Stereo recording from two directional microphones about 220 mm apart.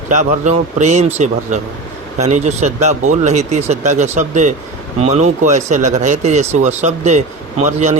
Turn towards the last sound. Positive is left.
turn(degrees=-35)  # may be behind; listen again after turning